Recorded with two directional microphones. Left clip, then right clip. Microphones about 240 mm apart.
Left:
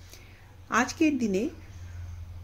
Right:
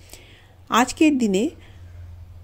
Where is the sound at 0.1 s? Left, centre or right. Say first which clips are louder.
Right 7 dB; right.